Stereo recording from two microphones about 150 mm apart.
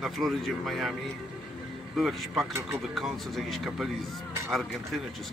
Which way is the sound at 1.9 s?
Centre (ahead or behind).